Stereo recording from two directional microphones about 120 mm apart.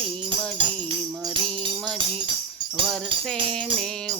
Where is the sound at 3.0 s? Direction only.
45° right (ahead or behind).